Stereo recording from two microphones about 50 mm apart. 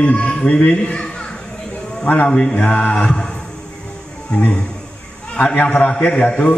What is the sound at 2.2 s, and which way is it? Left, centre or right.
Mantra, centre.